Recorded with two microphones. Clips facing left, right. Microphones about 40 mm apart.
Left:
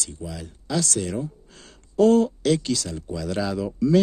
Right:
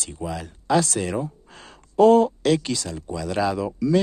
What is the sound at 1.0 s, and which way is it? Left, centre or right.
Speech, right.